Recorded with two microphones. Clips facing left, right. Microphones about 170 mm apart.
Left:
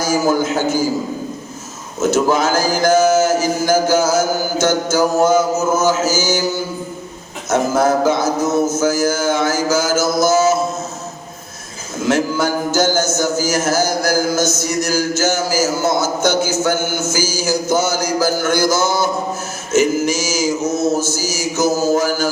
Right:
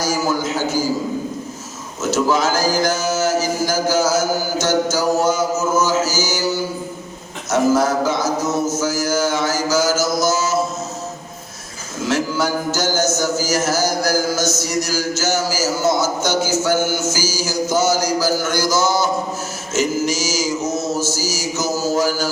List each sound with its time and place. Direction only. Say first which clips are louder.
0.0 s a man's voice: left 4 dB; 55° left (ahead or behind)
2.0 s speech: left 3 dB; 55° left (ahead or behind)
7.5 s mantra: left 1 dB; 55° left (ahead or behind)
12.0 s a sound: left 3 dB; 55° left (ahead or behind)
19.7 s mantra: left 4 dB; 55° left (ahead or behind)